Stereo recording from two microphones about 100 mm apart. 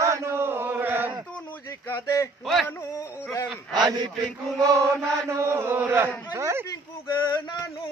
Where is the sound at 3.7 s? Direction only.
45° right (ahead or behind).